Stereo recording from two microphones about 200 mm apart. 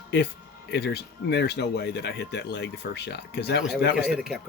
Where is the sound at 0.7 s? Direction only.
55° left (ahead or behind).